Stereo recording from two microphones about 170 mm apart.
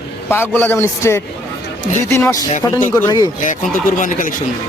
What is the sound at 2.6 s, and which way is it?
Speech, 20° left (ahead or behind).